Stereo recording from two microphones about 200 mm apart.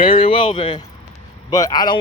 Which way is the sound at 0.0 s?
25° left (ahead or behind).